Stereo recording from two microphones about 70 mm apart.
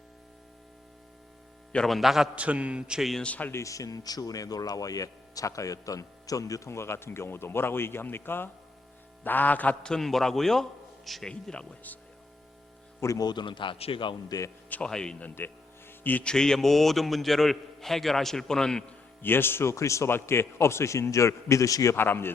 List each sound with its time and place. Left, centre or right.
1.9 s a man's voice: centre
2.3 s a man's voice: centre
3.0 s a man's voice: centre
3.2 s a man's voice: left
3.5 s a man's voice: left
9.8 s a man's voice: centre
13.0 s speech: left
14.3 s speech: left
14.8 s speech: centre
15.9 s a sound: left
16.2 s a man's voice: centre
19.2 s a man's voice: left
20.1 s speech: left
21.9 s a man's voice: left